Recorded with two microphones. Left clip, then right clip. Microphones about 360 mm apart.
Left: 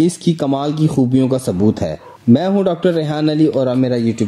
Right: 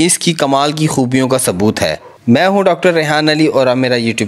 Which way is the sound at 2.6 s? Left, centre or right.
Centre.